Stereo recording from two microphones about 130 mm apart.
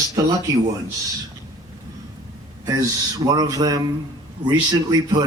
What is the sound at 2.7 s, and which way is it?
A man's voice, 30° right (ahead or behind).